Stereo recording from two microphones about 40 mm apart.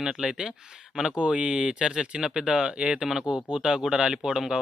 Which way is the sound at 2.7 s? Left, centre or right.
Right.